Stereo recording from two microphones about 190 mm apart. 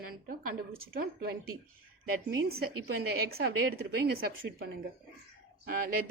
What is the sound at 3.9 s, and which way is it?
A woman's voice, 55° right (ahead or behind).